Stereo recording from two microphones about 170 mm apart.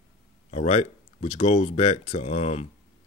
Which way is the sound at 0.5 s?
35° left (ahead or behind).